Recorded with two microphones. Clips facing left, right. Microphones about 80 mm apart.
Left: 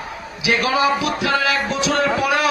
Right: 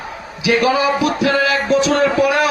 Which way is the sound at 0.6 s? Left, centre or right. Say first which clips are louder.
Right 2 dB; right.